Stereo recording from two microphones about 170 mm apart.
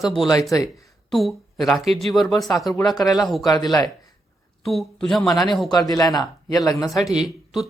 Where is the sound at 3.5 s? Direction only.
20° left (ahead or behind).